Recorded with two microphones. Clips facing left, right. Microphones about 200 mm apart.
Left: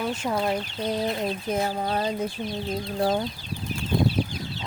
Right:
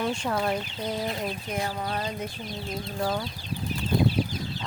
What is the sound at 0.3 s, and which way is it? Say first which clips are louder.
Chicken: left 4 dB; 15° left (ahead or behind).